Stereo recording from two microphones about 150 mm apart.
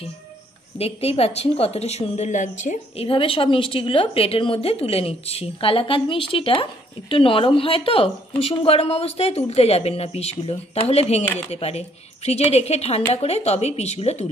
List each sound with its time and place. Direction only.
0.7 s speech: 40° left (ahead or behind)
3.1 s speech: 35° left (ahead or behind)